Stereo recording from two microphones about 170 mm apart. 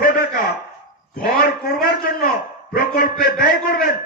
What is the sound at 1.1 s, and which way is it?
A man's voice, 60° left (ahead or behind).